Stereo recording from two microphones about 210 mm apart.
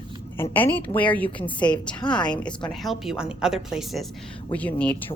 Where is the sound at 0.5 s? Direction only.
10° left (ahead or behind).